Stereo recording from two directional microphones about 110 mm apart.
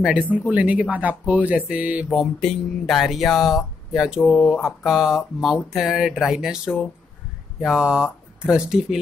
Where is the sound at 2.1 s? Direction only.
5° left (ahead or behind).